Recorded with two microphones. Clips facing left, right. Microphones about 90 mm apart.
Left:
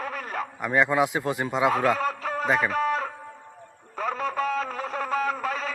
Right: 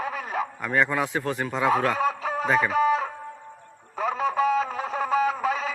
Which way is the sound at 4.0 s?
5° right (ahead or behind).